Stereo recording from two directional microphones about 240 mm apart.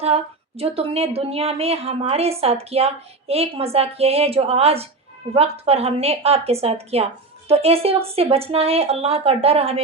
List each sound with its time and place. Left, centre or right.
0.0 s a woman's voice: right